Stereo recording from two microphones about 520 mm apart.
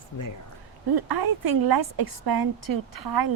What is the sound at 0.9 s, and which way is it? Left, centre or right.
A woman's voice, right.